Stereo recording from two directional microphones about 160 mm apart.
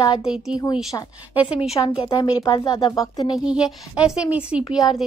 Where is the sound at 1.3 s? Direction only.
5° right (ahead or behind).